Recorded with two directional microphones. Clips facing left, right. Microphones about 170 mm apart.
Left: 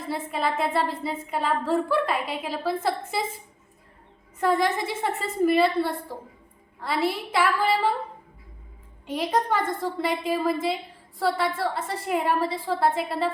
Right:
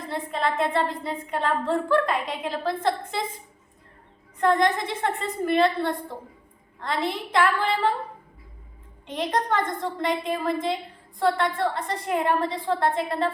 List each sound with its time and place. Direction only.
0.1 s a woman's voice: 5° left (ahead or behind)
4.4 s a woman's voice: 5° left (ahead or behind)
9.0 s a woman's voice: 5° left (ahead or behind)